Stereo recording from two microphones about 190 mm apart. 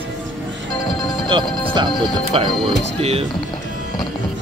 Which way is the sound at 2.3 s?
25° right (ahead or behind).